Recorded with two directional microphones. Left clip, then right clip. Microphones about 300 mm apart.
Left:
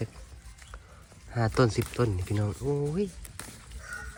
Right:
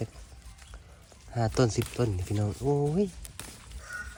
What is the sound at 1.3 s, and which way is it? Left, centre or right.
Speech, centre.